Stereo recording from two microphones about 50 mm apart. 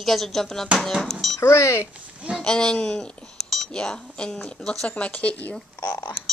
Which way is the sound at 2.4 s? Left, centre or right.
Centre.